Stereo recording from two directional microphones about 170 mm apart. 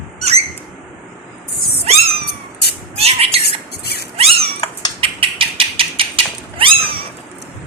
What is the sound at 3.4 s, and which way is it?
Squawk, 70° left (ahead or behind).